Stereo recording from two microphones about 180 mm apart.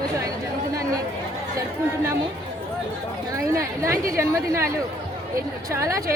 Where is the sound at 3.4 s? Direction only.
15° right (ahead or behind).